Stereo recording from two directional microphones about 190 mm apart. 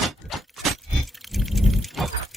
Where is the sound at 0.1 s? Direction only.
Centre (ahead or behind).